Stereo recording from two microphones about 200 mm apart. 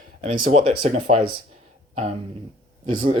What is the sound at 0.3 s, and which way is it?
Speech, 45° right (ahead or behind).